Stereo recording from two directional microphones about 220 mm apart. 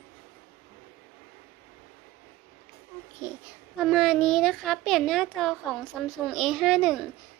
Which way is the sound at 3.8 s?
Centre (ahead or behind).